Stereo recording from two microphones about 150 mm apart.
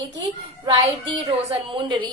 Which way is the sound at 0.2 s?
30° right (ahead or behind).